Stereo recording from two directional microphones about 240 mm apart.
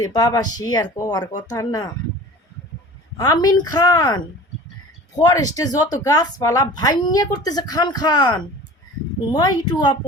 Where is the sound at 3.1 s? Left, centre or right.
Centre.